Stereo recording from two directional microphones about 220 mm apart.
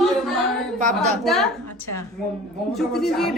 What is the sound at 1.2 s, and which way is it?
Speech, centre (ahead or behind).